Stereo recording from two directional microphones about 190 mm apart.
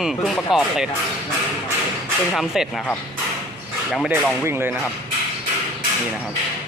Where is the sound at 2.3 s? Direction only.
Centre (ahead or behind).